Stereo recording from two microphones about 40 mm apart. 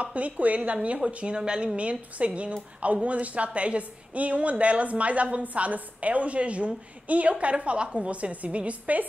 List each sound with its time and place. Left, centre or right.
0.0 s a woman's voice: right
1.8 s a woman's voice: right